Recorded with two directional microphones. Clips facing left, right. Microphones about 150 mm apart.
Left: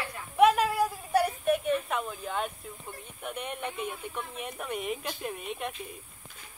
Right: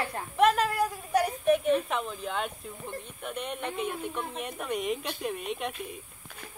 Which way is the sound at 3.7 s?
60° right (ahead or behind).